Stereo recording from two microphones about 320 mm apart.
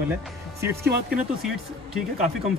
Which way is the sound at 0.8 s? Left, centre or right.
Right.